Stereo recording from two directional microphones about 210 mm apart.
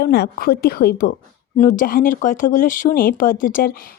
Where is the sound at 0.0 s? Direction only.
50° left (ahead or behind).